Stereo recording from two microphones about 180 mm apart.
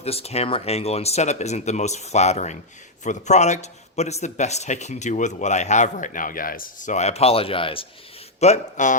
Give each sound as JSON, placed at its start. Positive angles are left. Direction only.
{"t": 0.0, "sound": "a man's voice", "side_deg": 35}
{"t": 8.4, "sound": "a man's voice", "side_deg": 40}